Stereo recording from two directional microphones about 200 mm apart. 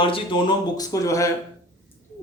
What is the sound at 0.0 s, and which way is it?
A man's voice, 25° left (ahead or behind).